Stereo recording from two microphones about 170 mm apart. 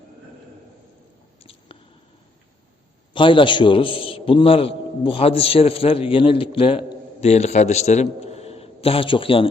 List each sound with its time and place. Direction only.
3.1 s a man's voice: 30° left (ahead or behind)